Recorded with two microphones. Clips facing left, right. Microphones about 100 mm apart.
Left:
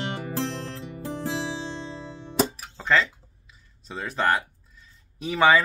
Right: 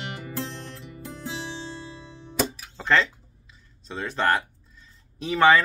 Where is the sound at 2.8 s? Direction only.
Centre (ahead or behind).